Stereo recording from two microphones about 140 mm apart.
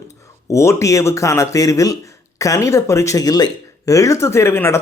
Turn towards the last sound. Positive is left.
turn(degrees=15)  # may be behind; listen again after turning